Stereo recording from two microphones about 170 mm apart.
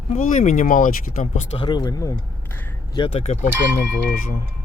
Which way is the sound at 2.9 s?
35° left (ahead or behind).